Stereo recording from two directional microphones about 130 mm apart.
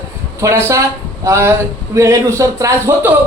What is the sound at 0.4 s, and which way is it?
Speech, 20° right (ahead or behind).